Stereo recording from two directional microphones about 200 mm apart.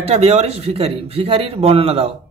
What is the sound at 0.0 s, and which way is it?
Speech, 30° right (ahead or behind).